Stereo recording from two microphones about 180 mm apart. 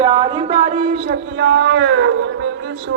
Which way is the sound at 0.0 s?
25° right (ahead or behind).